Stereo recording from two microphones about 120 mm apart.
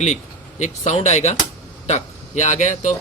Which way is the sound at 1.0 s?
70° left (ahead or behind).